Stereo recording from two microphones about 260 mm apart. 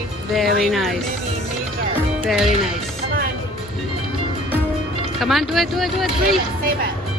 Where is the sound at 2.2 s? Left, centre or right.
Centre.